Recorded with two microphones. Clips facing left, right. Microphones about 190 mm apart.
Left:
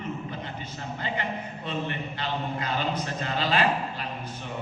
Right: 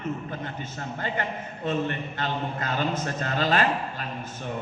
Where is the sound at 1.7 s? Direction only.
50° right (ahead or behind).